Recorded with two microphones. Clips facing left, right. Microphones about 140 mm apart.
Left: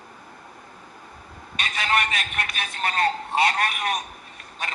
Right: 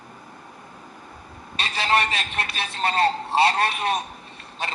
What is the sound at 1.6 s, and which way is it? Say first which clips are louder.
A man's voice: right 2 dB; 30° right (ahead or behind).